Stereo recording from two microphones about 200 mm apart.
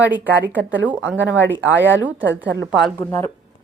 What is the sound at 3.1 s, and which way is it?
Speech, 15° left (ahead or behind).